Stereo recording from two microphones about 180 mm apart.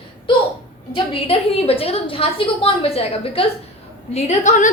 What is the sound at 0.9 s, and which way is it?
A woman's voice, 30° left (ahead or behind).